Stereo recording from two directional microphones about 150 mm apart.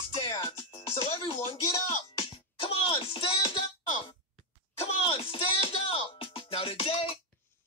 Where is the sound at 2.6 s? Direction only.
35° left (ahead or behind).